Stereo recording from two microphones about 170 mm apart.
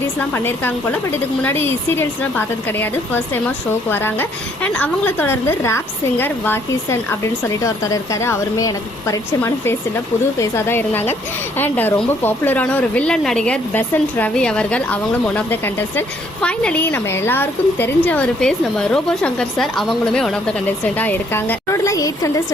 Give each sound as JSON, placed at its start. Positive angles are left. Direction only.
{"t": 0.2, "sound": "a woman's voice", "side_deg": 10}